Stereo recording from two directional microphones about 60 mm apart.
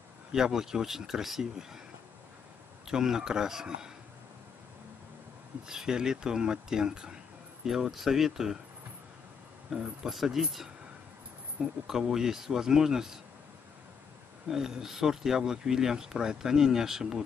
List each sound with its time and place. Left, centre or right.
0.3 s speech: centre
2.9 s speech: centre
5.7 s speech: centre
9.7 s speech: centre
11.6 s speech: centre
11.9 s speech: centre
14.5 s speech: centre